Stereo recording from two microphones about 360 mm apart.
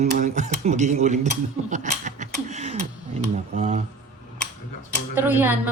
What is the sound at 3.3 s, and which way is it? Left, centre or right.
Speech, right.